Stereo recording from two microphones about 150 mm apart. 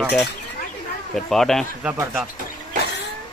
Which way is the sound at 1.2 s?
5° left (ahead or behind).